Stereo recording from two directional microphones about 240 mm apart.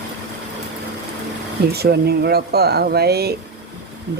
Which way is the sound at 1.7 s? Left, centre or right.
Right.